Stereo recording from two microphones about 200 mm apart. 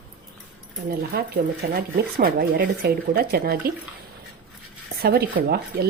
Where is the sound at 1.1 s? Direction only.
50° right (ahead or behind).